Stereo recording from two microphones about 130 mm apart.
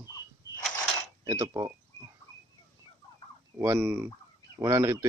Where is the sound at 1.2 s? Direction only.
25° right (ahead or behind).